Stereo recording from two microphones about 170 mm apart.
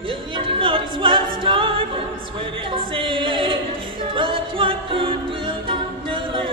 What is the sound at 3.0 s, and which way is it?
Music, 30° right (ahead or behind).